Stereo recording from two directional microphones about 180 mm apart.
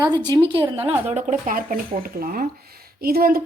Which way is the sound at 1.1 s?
45° right (ahead or behind).